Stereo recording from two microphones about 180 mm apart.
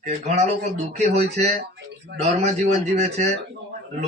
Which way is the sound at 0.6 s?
40° right (ahead or behind).